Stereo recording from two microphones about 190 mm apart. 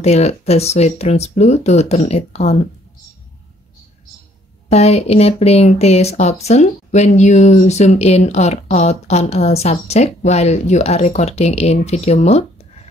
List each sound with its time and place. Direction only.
0.0 s speech: 35° left (ahead or behind)
4.6 s speech: 35° left (ahead or behind)